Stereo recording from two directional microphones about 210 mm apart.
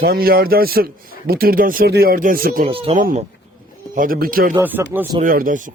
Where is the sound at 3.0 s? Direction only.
35° right (ahead or behind).